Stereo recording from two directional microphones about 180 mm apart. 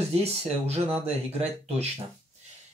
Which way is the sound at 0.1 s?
35° right (ahead or behind).